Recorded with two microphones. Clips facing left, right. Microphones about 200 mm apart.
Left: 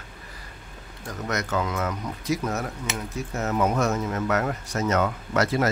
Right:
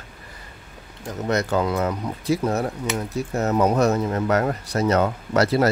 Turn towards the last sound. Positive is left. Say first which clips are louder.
# right 4 dB
turn(degrees=-35)  # may be behind; listen again after turning